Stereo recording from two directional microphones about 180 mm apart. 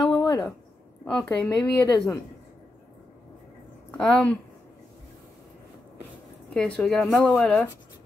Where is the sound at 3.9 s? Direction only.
5° left (ahead or behind).